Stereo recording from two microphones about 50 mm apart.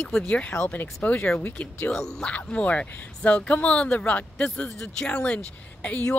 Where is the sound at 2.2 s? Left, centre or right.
Left.